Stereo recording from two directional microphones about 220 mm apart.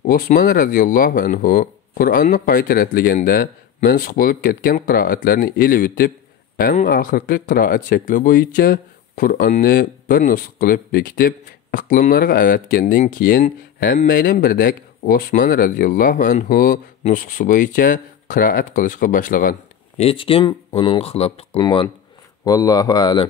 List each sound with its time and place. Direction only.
0.0 s speech: 40° left (ahead or behind)
20.0 s speech: 25° left (ahead or behind)